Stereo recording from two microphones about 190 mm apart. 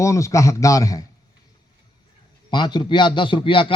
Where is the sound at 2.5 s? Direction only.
25° left (ahead or behind).